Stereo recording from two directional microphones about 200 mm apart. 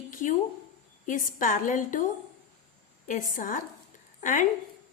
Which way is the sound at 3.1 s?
40° left (ahead or behind).